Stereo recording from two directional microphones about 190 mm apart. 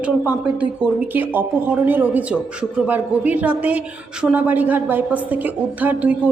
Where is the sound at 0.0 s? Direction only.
5° right (ahead or behind).